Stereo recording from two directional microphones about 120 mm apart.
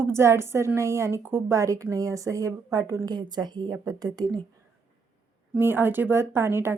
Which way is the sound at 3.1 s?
35° right (ahead or behind).